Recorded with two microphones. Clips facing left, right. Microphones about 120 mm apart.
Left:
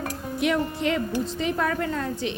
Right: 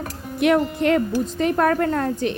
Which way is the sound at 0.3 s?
55° right (ahead or behind).